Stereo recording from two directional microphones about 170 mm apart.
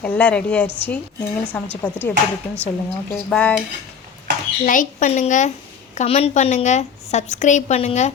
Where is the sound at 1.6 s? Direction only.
5° left (ahead or behind).